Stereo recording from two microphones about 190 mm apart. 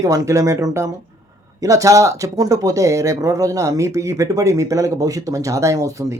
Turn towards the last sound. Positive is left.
turn(degrees=-15)  # may be behind; listen again after turning